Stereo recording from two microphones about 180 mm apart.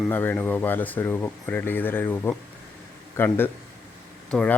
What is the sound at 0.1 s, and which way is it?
Speech, 10° left (ahead or behind).